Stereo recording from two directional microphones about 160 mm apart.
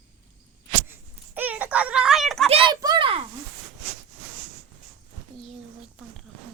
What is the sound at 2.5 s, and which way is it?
Speech, 35° right (ahead or behind).